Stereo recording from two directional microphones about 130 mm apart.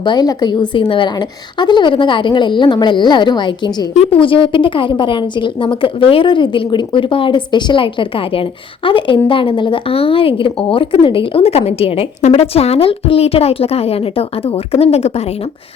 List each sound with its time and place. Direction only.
0.0 s a woman's voice: 35° left (ahead or behind); by 15.2 s 55° left (ahead or behind)